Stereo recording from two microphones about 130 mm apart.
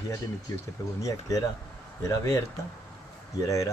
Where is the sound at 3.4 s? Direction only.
25° left (ahead or behind).